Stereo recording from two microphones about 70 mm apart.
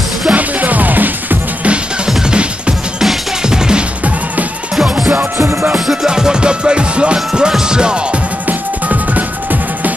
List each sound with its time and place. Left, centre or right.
0.3 s music: right
2.0 s music: centre
5.1 s music: right
5.9 s music: centre
8.5 s music: right